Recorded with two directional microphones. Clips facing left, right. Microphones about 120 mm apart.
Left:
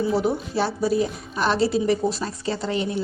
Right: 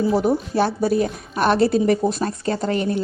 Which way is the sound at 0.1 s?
45° right (ahead or behind).